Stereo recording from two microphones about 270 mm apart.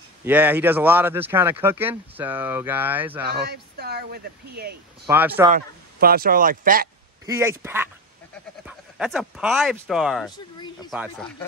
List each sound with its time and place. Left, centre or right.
0.2 s speech: centre
3.3 s speech: right
5.0 s speech: centre
5.5 s speech: right
7.2 s speech: centre
10.3 s a sound: centre
10.9 s speech: centre